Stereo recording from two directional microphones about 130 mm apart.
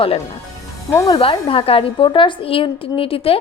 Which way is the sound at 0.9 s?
30° left (ahead or behind).